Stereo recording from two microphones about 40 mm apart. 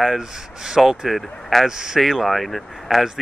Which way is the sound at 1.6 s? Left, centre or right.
Centre.